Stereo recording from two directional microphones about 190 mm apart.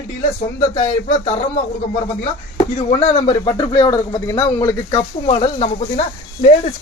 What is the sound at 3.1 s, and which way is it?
A man's voice, 30° left (ahead or behind).